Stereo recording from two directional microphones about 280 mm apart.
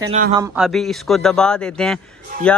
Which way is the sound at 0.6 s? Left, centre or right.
Centre.